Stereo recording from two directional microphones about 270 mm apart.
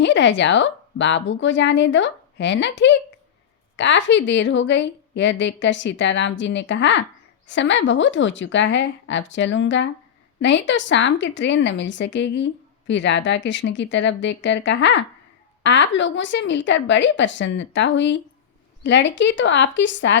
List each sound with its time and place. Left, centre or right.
0.0 s a woman's voice: left